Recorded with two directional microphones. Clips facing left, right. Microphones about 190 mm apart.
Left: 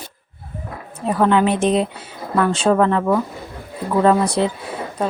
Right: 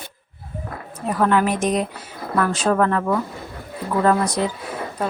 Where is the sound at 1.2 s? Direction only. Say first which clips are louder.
Left 3 dB; 25° left (ahead or behind).